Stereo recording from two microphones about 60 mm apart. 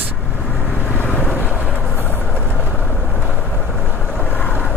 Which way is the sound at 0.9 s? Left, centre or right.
Left.